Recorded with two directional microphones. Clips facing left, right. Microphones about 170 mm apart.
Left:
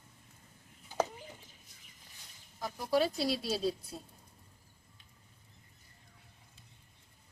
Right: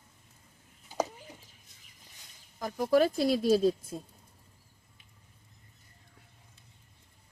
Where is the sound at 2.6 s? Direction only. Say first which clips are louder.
Right 6 dB; 50° right (ahead or behind).